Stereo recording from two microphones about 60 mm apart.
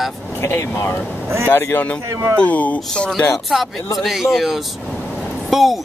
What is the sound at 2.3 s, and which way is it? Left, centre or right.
Speech, left.